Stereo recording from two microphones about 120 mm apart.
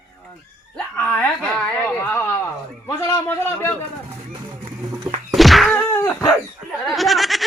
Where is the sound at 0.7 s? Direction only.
15° left (ahead or behind).